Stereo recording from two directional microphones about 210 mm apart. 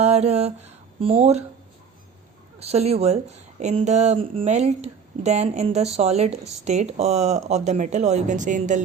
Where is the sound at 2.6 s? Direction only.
30° right (ahead or behind).